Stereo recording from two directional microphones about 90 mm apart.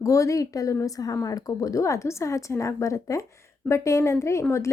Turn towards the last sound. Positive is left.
turn(degrees=30)  # may be behind; listen again after turning